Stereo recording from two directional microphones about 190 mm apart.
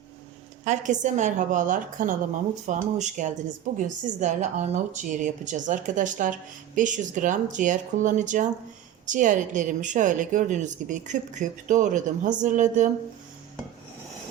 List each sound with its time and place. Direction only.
0.6 s speech: 40° right (ahead or behind)